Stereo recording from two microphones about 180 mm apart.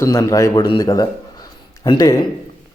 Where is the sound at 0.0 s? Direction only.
15° left (ahead or behind).